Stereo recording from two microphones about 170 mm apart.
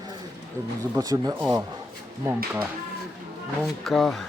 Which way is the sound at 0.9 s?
20° right (ahead or behind).